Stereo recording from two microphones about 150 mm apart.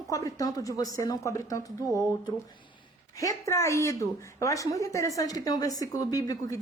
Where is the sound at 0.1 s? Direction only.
20° left (ahead or behind).